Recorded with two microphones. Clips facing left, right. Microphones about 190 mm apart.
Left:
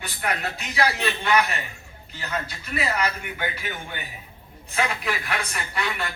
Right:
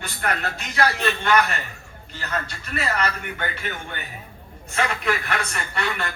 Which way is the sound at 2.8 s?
15° left (ahead or behind).